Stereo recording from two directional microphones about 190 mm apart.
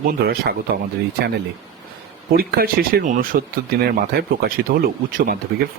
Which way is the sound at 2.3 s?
50° right (ahead or behind).